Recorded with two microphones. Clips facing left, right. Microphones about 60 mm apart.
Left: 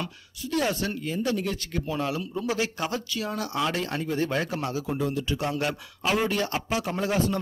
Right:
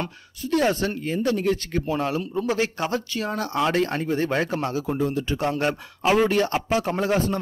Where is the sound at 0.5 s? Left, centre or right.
Right.